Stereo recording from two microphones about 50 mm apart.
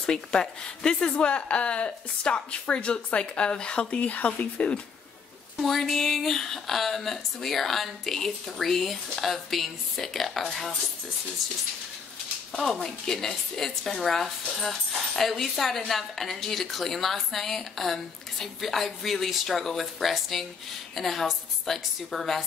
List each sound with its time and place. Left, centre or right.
0.0 s speech: centre
5.6 s speech: centre